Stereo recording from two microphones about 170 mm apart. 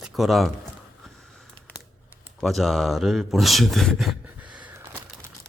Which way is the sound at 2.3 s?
Centre (ahead or behind).